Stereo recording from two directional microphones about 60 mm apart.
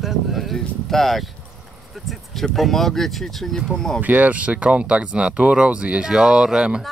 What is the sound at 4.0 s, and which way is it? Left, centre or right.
Speech, right.